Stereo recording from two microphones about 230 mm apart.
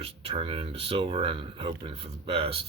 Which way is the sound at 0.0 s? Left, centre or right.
Right.